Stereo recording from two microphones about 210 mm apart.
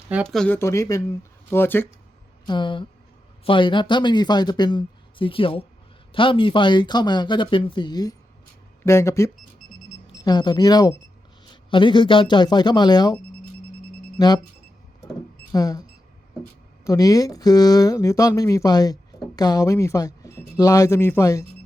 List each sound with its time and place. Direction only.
0.1 s speech: centre (ahead or behind)
2.5 s a man's voice: 20° left (ahead or behind)
14.2 s a man's voice: 20° left (ahead or behind)
15.5 s speech: 15° left (ahead or behind)